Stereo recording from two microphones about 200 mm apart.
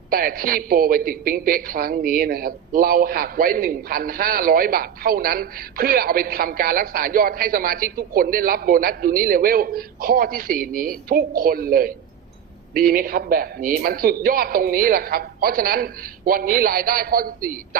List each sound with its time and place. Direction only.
0.1 s a woman's voice: 45° right (ahead or behind)